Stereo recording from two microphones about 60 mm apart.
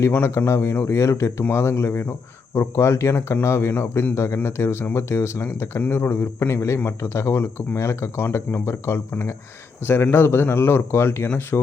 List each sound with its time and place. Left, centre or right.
0.2 s speech: left